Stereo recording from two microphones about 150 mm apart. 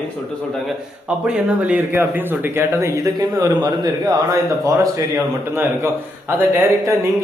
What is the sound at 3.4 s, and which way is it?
Speech, 25° right (ahead or behind).